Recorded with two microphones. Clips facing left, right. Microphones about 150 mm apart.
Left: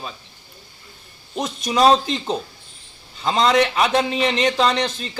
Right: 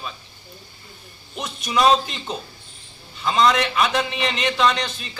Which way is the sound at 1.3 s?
35° left (ahead or behind).